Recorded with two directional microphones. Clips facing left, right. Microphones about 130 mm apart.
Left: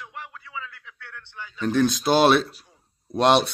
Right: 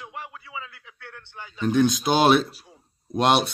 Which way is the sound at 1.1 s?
45° right (ahead or behind).